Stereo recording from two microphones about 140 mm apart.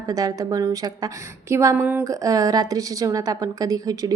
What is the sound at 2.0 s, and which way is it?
A woman's voice, 25° right (ahead or behind).